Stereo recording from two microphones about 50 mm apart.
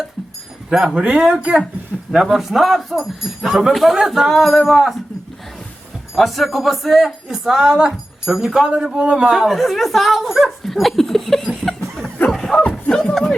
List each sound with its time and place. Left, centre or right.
0.7 s speech: centre
2.1 s speech: centre
6.1 s speech: centre
9.3 s a sound: centre
12.7 s clip-clop: centre